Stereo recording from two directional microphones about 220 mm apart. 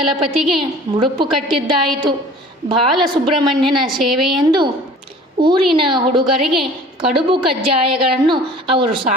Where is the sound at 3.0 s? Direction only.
20° right (ahead or behind).